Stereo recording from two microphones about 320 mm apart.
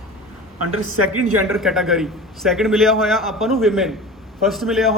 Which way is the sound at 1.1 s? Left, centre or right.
Right.